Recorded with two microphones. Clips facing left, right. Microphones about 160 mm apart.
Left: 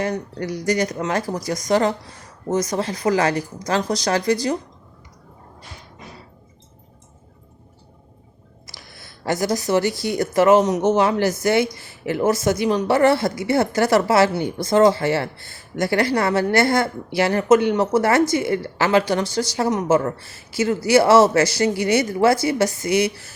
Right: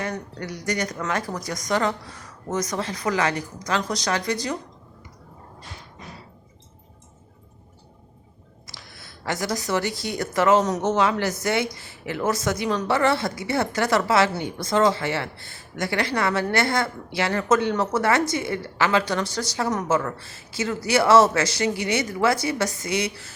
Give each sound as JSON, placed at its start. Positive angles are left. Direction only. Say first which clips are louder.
{"t": 0.0, "sound": "speech", "louder": "left 6 dB", "side_deg": 35}
{"t": 9.2, "sound": "speech", "louder": "left 6 dB", "side_deg": 35}